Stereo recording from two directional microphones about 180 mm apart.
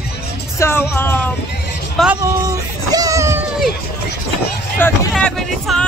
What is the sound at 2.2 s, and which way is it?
Music, 15° right (ahead or behind).